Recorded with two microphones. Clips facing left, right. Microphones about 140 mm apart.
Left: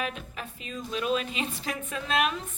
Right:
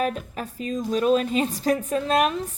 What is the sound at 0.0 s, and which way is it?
A woman's voice, 40° right (ahead or behind).